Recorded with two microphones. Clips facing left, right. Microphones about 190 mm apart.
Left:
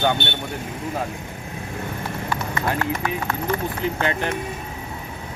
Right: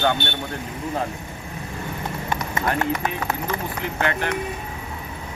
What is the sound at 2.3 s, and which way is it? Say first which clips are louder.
Clip-clop: right 1 dB; 20° right (ahead or behind).